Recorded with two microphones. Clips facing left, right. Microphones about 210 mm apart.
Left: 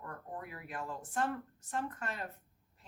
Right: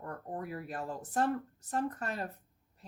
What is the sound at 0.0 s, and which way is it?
Speech, 40° right (ahead or behind).